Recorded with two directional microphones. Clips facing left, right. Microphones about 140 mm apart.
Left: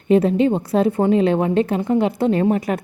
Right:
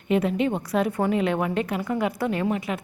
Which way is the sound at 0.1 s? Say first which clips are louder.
Left 7 dB; 30° left (ahead or behind).